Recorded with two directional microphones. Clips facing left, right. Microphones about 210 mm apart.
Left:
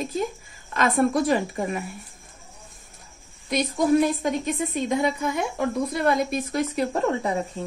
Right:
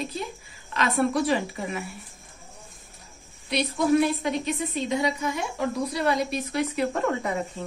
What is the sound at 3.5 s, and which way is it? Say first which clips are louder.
A woman's voice: left 2 dB; 45° left (ahead or behind).